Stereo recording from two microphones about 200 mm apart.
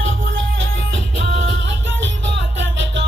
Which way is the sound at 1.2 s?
65° right (ahead or behind).